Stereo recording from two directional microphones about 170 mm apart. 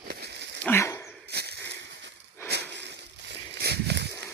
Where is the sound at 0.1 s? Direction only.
75° right (ahead or behind).